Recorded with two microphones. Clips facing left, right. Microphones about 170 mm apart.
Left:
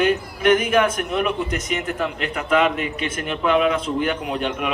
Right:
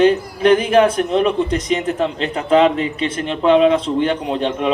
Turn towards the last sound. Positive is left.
turn(degrees=-30)  # may be behind; listen again after turning